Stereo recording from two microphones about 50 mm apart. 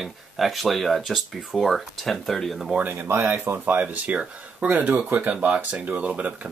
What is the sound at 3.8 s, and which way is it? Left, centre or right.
Speech, right.